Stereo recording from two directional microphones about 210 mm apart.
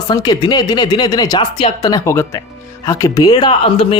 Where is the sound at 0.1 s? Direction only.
20° left (ahead or behind).